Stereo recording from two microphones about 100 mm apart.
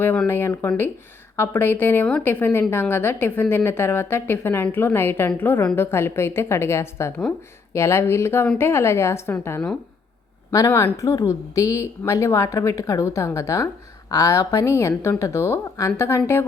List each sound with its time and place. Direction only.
0.3 s a woman's voice: 20° left (ahead or behind)
10.7 s a woman's voice: 20° left (ahead or behind)
10.9 s a woman's voice: 35° left (ahead or behind)